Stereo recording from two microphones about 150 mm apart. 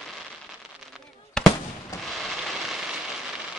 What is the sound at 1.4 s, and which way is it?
Fireworks, 5° left (ahead or behind).